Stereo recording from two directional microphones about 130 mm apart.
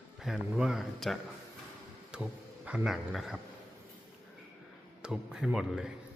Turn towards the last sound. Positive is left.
turn(degrees=-5)  # may be behind; listen again after turning